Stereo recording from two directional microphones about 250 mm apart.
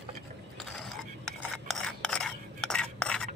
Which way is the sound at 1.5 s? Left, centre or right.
Centre.